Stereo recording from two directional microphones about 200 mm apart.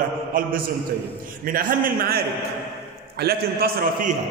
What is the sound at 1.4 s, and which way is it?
A man's voice, 45° right (ahead or behind).